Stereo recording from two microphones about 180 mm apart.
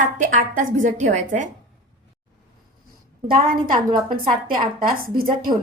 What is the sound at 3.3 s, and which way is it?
A woman's voice, 55° right (ahead or behind).